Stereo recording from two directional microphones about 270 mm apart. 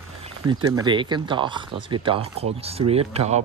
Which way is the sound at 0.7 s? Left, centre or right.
Centre.